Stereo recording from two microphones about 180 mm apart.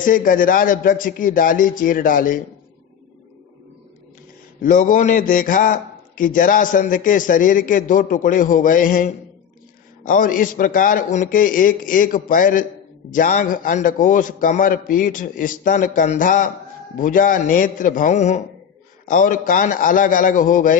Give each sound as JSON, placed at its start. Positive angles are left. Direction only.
{"t": 0.0, "sound": "a man's voice", "side_deg": 50}
{"t": 4.6, "sound": "a man's voice", "side_deg": 45}